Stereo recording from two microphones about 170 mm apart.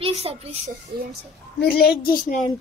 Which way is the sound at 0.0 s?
35° right (ahead or behind).